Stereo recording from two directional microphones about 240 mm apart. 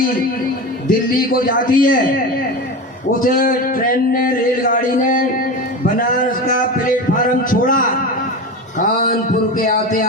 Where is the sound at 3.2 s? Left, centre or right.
Left.